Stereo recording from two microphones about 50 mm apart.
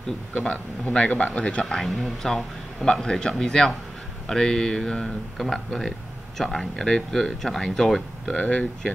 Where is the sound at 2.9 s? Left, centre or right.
Centre.